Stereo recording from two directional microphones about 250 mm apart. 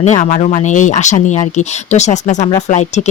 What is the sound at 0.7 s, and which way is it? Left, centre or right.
Speech, left.